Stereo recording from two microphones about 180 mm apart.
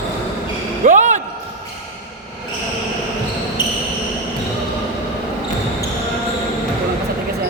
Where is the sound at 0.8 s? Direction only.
45° right (ahead or behind).